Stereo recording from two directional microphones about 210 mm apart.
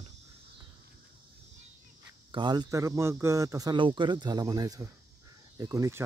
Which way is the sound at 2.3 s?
20° right (ahead or behind).